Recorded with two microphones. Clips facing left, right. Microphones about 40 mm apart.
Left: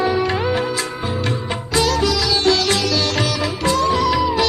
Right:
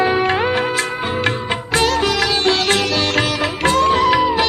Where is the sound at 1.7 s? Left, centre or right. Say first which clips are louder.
Right 1 dB; right.